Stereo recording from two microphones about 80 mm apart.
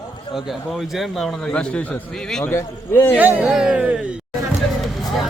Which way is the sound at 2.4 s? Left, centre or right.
Left.